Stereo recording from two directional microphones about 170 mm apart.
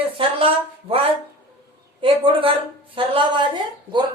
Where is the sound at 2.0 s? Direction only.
30° right (ahead or behind).